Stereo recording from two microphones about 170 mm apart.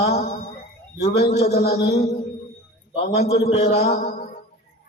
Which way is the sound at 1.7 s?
75° left (ahead or behind).